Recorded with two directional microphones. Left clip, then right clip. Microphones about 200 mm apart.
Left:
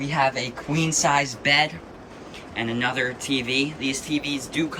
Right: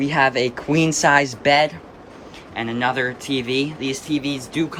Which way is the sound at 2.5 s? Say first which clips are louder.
Right 3 dB; centre (ahead or behind).